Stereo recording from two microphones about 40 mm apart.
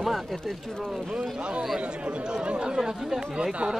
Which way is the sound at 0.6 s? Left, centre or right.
Centre.